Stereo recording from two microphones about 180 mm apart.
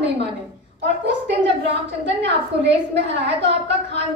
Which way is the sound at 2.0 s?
75° right (ahead or behind).